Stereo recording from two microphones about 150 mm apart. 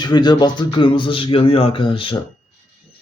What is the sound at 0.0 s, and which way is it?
Speech, 30° left (ahead or behind).